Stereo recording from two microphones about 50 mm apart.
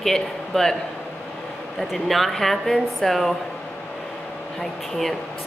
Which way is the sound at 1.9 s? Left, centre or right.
Centre.